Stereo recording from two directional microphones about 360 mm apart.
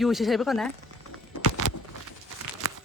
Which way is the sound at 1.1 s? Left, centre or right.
Left.